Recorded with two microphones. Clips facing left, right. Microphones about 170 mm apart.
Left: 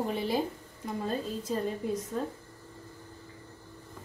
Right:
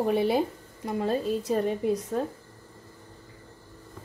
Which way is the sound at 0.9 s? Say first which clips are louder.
Right 7 dB; 75° right (ahead or behind).